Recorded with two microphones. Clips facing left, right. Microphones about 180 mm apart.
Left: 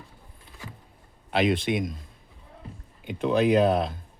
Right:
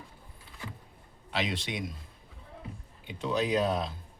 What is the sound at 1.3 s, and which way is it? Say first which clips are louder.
Speech: left 10 dB; 55° left (ahead or behind).